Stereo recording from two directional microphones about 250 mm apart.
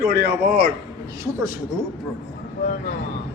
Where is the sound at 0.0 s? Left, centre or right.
Right.